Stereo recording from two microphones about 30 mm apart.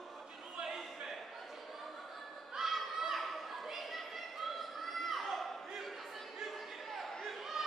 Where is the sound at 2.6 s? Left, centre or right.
Centre.